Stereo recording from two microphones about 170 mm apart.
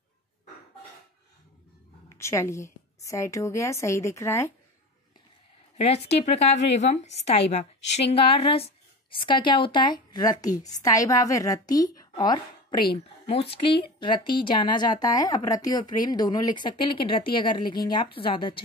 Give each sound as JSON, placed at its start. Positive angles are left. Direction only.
{"t": 2.1, "sound": "a woman's voice", "side_deg": 15}
{"t": 6.0, "sound": "a woman's voice", "side_deg": 40}
{"t": 13.3, "sound": "a woman's voice", "side_deg": 35}